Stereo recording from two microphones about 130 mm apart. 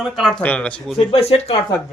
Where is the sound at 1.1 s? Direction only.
50° left (ahead or behind).